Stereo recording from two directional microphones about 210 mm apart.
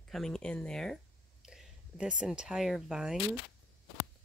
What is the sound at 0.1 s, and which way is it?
Speech, centre (ahead or behind).